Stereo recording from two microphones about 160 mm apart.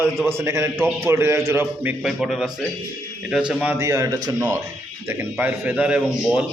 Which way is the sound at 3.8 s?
20° right (ahead or behind).